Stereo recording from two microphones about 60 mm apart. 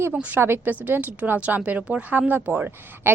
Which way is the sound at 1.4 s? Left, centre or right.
Right.